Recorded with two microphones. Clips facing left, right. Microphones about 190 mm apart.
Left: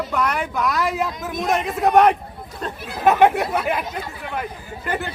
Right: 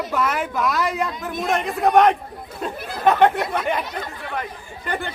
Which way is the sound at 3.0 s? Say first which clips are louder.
Left 1 dB; 10° left (ahead or behind).